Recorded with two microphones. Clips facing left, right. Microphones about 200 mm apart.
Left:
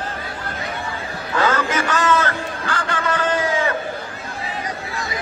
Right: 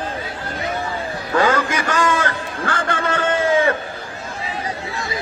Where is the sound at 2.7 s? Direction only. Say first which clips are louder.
Right 2 dB; 50° right (ahead or behind).